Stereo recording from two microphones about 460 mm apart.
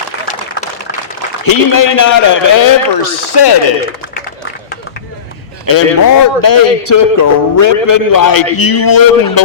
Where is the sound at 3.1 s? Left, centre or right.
Left.